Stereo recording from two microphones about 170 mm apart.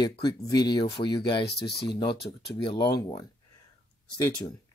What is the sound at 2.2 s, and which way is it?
Speech, 35° left (ahead or behind).